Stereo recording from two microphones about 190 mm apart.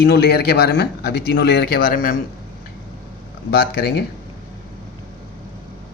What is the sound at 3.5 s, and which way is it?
Speech, 55° left (ahead or behind).